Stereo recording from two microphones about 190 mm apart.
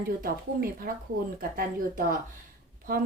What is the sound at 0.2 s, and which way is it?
Speech, 50° right (ahead or behind).